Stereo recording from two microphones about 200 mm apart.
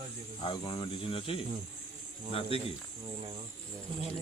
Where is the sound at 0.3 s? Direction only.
25° left (ahead or behind).